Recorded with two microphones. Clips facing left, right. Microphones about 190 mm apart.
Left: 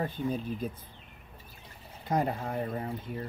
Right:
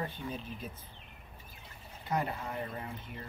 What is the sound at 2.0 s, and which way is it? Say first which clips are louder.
Speech: left 5 dB; 45° left (ahead or behind).